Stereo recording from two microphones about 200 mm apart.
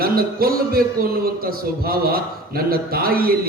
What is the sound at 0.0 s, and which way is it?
A man's voice, 50° right (ahead or behind).